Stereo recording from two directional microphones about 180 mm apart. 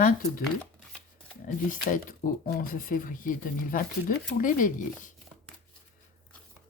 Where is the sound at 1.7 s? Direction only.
50° left (ahead or behind).